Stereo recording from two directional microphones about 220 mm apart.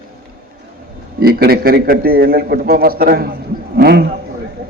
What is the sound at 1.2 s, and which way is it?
A man's voice, 45° right (ahead or behind).